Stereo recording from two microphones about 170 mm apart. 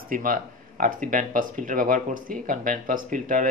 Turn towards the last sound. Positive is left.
turn(degrees=-50)  # may be behind; listen again after turning